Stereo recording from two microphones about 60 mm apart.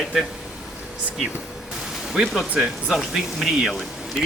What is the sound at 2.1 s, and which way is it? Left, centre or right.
Speech, centre.